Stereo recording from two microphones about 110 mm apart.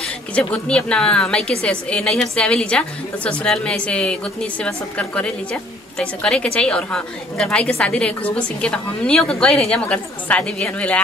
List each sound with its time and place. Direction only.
0.0 s a woman's voice: 10° left (ahead or behind)